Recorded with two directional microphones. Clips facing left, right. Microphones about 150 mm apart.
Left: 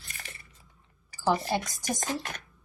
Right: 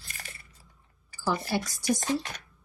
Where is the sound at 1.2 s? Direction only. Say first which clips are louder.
Left 2 dB; 20° left (ahead or behind).